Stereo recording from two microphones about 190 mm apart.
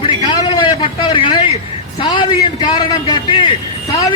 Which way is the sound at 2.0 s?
25° left (ahead or behind).